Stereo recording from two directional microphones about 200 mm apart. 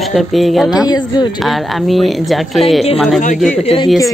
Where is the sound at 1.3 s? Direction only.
Centre (ahead or behind).